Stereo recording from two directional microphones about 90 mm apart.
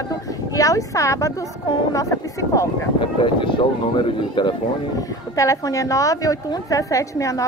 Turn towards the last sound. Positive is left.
turn(degrees=35)  # may be behind; listen again after turning